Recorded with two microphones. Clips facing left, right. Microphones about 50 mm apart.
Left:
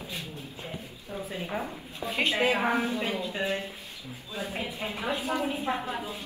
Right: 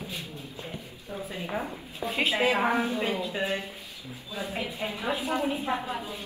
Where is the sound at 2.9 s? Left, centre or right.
Right.